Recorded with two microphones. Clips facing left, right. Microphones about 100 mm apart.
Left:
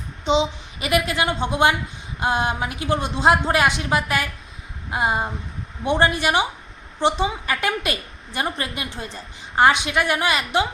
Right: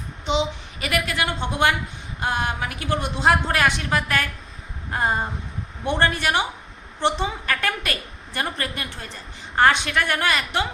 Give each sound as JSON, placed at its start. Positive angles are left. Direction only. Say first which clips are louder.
{"t": 0.3, "sound": "a woman's voice", "louder": "left 3 dB", "side_deg": 20}